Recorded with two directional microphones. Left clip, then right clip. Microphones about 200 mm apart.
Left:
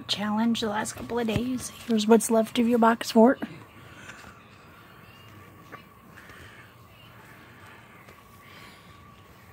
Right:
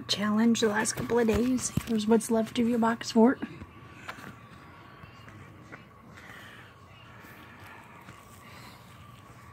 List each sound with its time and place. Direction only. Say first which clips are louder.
0.0 s speech: even; 5° left (ahead or behind)
2.0 s speech: left 5 dB; 30° left (ahead or behind)